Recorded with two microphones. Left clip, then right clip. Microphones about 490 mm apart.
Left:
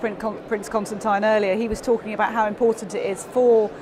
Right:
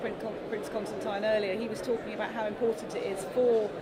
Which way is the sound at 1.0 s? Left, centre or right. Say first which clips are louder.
Left 10 dB; left.